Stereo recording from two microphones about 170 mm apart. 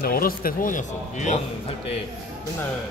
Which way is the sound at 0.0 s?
60° left (ahead or behind).